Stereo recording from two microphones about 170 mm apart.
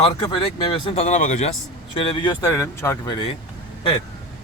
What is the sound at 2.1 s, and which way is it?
Speech, 25° left (ahead or behind).